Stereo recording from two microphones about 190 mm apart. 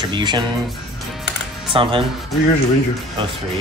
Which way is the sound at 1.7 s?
25° right (ahead or behind).